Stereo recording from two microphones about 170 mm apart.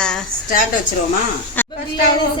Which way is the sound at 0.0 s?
5° left (ahead or behind).